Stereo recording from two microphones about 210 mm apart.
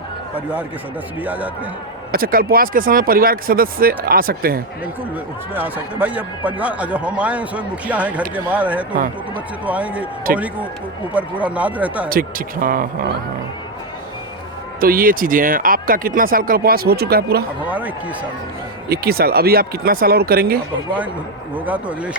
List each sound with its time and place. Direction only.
1.2 s speech: 10° right (ahead or behind)
2.1 s speech: 45° right (ahead or behind)
5.5 s speech: 10° right (ahead or behind)
12.0 s speech: 45° right (ahead or behind)
14.8 s speech: 45° right (ahead or behind)
17.7 s speech: 5° right (ahead or behind)
18.9 s speech: 45° right (ahead or behind)
21.5 s speech: 5° right (ahead or behind)